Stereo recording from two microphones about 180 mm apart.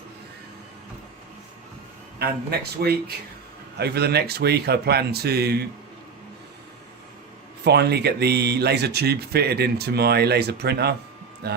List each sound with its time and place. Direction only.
2.1 s speech: 60° right (ahead or behind)
7.6 s speech: 65° right (ahead or behind)